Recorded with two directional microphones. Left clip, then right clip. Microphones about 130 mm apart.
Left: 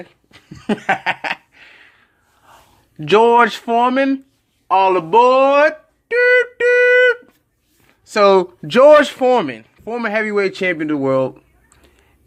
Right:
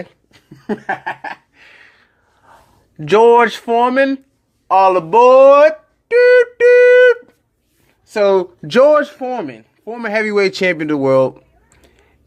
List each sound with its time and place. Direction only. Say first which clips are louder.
0.5 s laughter: left 3 dB; 50° left (ahead or behind)
1.5 s a sound: right 1 dB; 5° right (ahead or behind)
3.0 s speech: right 2 dB; centre (ahead or behind)
4.7 s a sound: right 2 dB; 5° right (ahead or behind)
8.0 s speech: left 1 dB; 30° left (ahead or behind)
8.6 s speech: even; centre (ahead or behind)
9.0 s speech: left 5 dB; 45° left (ahead or behind)
10.1 s speech: right 3 dB; 15° right (ahead or behind)
11.3 s a sound: right 2 dB; 5° right (ahead or behind)